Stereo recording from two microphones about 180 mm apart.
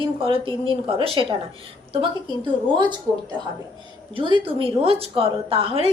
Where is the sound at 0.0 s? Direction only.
30° right (ahead or behind).